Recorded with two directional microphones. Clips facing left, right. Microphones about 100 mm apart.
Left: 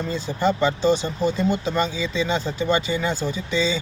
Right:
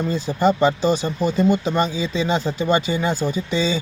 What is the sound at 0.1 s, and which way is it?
Speech, 15° right (ahead or behind).